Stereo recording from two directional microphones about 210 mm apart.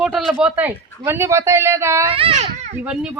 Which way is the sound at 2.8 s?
5° right (ahead or behind).